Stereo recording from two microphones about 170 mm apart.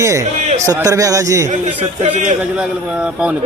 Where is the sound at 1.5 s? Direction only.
45° right (ahead or behind).